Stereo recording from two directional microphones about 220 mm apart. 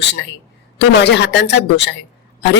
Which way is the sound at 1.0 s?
50° left (ahead or behind).